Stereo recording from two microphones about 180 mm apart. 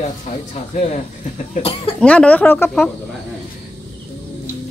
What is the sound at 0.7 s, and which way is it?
Speech, 40° left (ahead or behind).